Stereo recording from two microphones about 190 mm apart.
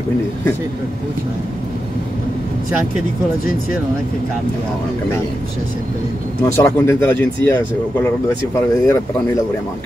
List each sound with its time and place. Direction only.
6.4 s speech: 15° left (ahead or behind)
8.5 s speech: 15° left (ahead or behind)